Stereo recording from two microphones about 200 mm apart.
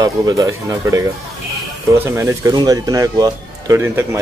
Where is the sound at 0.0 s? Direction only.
15° right (ahead or behind).